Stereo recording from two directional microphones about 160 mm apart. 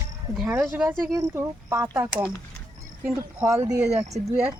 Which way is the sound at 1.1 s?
20° right (ahead or behind).